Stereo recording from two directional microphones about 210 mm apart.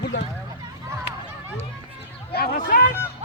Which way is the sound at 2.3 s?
45° left (ahead or behind).